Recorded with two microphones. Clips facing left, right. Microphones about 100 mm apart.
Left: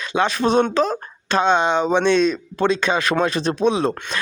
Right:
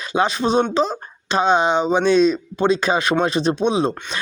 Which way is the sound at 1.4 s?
10° right (ahead or behind).